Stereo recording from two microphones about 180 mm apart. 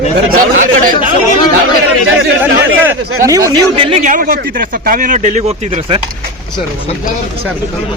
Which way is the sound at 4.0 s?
45° right (ahead or behind).